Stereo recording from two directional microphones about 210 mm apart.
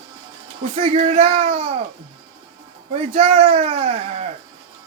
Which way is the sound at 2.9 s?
30° right (ahead or behind).